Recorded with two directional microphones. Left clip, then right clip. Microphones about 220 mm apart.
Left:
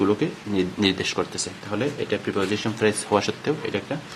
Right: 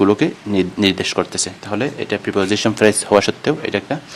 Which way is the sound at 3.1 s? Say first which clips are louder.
Right 8 dB; 35° right (ahead or behind).